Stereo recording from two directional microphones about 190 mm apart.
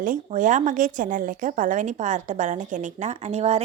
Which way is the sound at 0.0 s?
45° right (ahead or behind).